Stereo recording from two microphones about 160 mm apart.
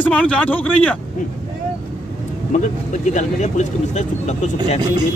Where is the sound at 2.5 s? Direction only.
50° left (ahead or behind).